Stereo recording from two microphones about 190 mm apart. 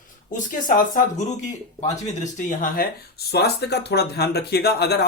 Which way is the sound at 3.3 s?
60° left (ahead or behind).